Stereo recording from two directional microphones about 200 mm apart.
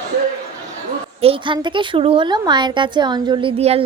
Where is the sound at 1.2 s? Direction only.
25° right (ahead or behind).